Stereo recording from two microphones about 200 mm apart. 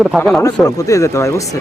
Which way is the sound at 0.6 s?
15° left (ahead or behind).